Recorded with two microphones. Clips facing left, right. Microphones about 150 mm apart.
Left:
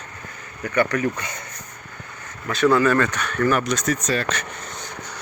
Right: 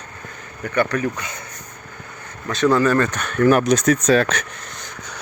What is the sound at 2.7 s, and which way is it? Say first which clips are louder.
Speech: right 2 dB; 20° right (ahead or behind).